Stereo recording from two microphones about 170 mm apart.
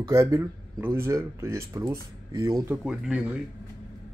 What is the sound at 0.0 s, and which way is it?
Speech, 15° right (ahead or behind).